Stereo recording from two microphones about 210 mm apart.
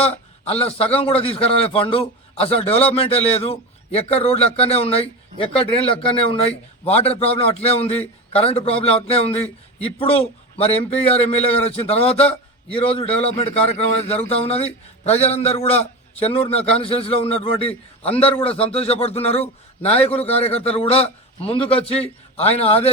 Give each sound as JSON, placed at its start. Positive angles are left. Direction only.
{"t": 0.0, "sound": "a man's voice", "side_deg": 30}